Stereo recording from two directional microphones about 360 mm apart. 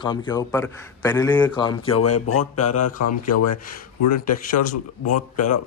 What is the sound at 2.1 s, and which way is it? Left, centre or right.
A man's voice, left.